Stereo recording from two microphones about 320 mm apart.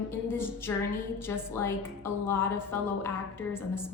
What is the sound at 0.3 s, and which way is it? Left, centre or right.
A woman's voice, centre.